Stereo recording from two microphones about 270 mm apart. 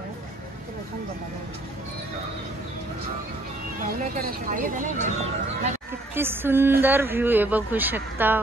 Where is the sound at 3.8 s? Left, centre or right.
Right.